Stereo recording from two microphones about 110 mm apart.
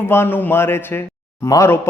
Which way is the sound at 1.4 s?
30° left (ahead or behind).